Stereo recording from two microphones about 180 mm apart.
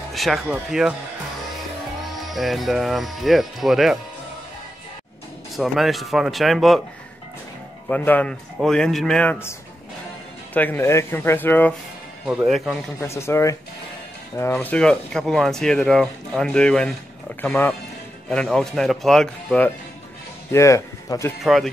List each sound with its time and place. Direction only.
0.1 s speech: centre (ahead or behind)
2.0 s speech: centre (ahead or behind)
5.6 s speech: centre (ahead or behind)
7.9 s speech: 10° left (ahead or behind)
12.3 s speech: centre (ahead or behind)
13.0 s speech: 15° left (ahead or behind)
20.5 s speech: 15° left (ahead or behind)
21.4 s speech: centre (ahead or behind)